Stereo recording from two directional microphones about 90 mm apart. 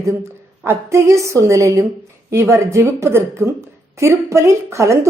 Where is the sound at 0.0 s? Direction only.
30° right (ahead or behind).